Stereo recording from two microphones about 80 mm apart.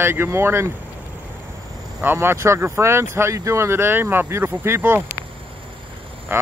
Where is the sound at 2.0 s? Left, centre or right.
Right.